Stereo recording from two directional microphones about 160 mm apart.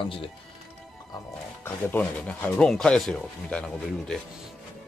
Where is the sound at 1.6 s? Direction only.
10° left (ahead or behind).